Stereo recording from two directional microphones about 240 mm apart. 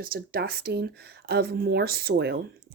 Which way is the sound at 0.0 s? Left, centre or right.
Right.